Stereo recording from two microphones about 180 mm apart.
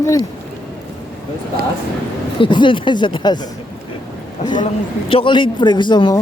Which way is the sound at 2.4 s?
25° left (ahead or behind).